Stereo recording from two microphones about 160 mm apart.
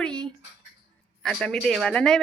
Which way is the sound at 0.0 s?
5° left (ahead or behind).